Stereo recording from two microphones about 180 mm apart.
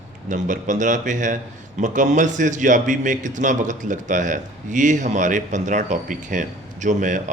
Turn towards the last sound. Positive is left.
turn(degrees=-45)  # may be behind; listen again after turning